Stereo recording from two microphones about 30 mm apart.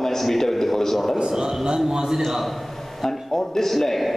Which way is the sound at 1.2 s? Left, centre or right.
Right.